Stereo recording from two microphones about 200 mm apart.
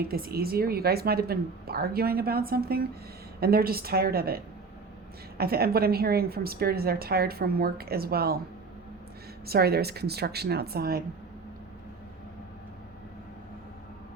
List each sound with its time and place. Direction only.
0.1 s a woman's voice: 50° right (ahead or behind)
5.4 s a woman's voice: 50° right (ahead or behind)
9.5 s a woman's voice: 50° right (ahead or behind)